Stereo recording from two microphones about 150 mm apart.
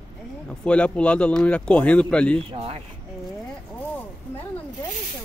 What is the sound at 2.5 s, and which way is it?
Speech, 40° right (ahead or behind).